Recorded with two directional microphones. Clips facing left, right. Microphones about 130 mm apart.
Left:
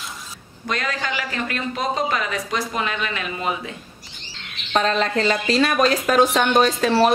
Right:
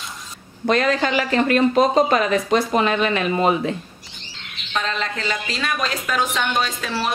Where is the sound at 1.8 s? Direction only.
45° right (ahead or behind).